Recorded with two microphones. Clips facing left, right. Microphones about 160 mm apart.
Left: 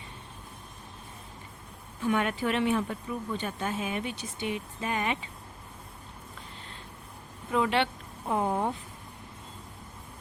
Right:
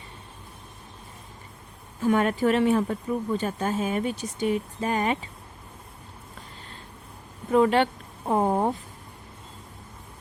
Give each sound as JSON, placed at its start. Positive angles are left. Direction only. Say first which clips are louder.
{"t": 2.0, "sound": "speech", "louder": "right 6 dB", "side_deg": -40}
{"t": 7.5, "sound": "speech", "louder": "right 7 dB", "side_deg": -40}